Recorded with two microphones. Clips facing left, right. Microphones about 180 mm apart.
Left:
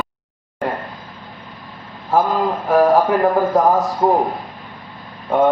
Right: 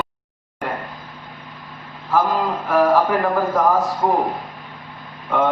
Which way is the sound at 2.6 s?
40° left (ahead or behind).